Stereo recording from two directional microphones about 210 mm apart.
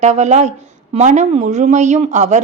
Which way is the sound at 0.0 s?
35° right (ahead or behind).